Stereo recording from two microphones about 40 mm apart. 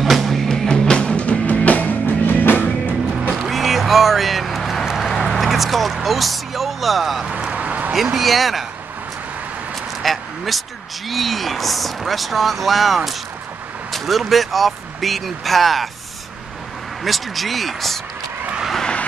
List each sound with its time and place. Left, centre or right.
0.0 s music: centre
0.5 s music: centre; by 2.6 s left
3.3 s music: centre
5.0 s a sound: centre
7.2 s vehicle: right
7.5 s a sound: right
7.9 s speech: centre
10.0 s a sound: centre
11.1 s speech: centre
17.0 s speech: centre